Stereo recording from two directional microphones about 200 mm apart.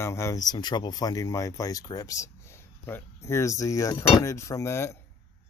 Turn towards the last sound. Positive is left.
turn(degrees=15)  # may be behind; listen again after turning